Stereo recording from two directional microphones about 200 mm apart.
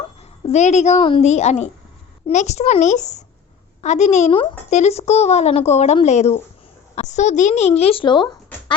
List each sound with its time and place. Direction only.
0.4 s speech: 35° left (ahead or behind)